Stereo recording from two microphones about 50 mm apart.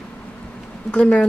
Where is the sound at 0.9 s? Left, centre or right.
Left.